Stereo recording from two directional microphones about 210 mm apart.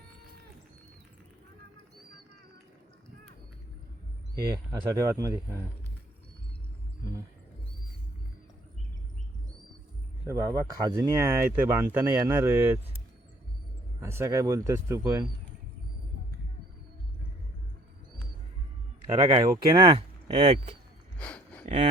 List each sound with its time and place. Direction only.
4.5 s speech: 15° right (ahead or behind)
10.2 s speech: 15° right (ahead or behind)
14.0 s speech: 15° right (ahead or behind)
19.2 s speech: 25° right (ahead or behind)
21.2 s a sound: 5° left (ahead or behind)